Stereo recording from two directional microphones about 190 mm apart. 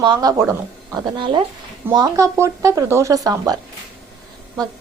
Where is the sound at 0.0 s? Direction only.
20° right (ahead or behind).